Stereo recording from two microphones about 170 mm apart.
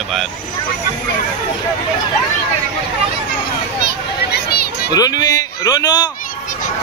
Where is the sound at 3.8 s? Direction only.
70° left (ahead or behind).